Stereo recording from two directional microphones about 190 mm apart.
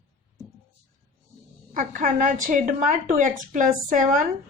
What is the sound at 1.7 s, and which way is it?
A woman's voice, 45° right (ahead or behind).